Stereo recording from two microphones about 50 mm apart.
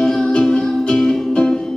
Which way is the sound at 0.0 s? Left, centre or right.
Centre.